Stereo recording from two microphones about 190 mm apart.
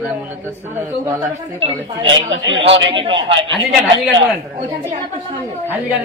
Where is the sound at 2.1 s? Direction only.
80° right.